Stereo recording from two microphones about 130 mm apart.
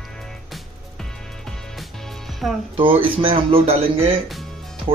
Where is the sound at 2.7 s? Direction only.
45° right (ahead or behind).